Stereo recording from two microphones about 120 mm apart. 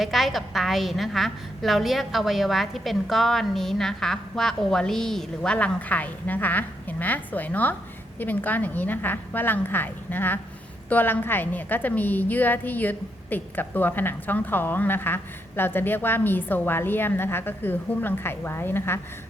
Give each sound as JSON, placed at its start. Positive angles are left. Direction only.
{"t": 0.0, "sound": "a woman's voice", "side_deg": 0}